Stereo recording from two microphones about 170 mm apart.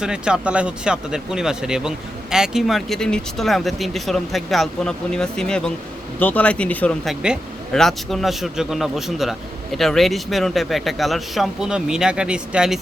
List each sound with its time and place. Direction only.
0.0 s speech: 5° right (ahead or behind)